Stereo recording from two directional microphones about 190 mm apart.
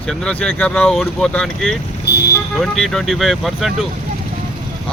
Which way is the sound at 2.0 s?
60° left (ahead or behind).